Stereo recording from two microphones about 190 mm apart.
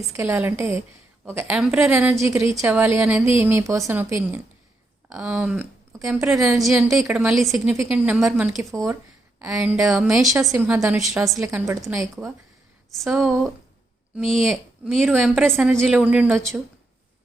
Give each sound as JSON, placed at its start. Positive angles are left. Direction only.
{"t": 0.1, "sound": "a woman's voice", "side_deg": -10}
{"t": 8.7, "sound": "speech", "side_deg": -15}
{"t": 9.4, "sound": "a woman's voice", "side_deg": -5}
{"t": 10.5, "sound": "a woman's voice", "side_deg": -10}
{"t": 11.3, "sound": "speech", "side_deg": -15}
{"t": 12.9, "sound": "a woman's voice", "side_deg": 0}